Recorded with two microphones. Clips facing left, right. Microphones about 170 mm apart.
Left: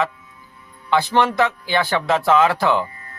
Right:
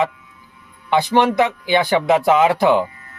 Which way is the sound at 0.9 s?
15° right (ahead or behind).